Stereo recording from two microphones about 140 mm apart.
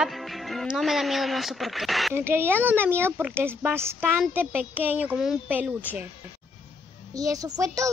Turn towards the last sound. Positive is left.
turn(degrees=-25)  # may be behind; listen again after turning